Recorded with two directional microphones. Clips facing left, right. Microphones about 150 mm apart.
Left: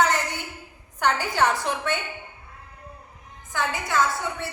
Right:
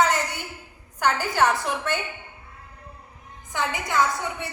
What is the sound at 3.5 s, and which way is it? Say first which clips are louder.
Speech: even; 20° right (ahead or behind).